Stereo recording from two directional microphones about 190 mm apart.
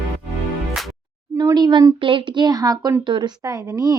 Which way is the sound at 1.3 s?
20° right (ahead or behind).